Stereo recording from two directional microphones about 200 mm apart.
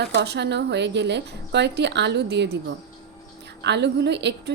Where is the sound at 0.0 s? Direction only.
55° right (ahead or behind).